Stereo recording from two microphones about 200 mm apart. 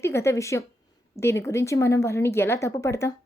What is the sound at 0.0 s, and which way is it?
Speech, 15° left (ahead or behind).